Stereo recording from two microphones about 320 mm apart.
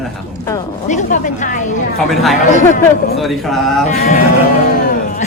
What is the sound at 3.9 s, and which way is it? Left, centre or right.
Speech, left.